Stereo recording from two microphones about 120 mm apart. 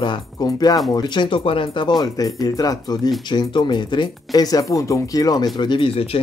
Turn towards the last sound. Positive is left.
turn(degrees=50)  # may be behind; listen again after turning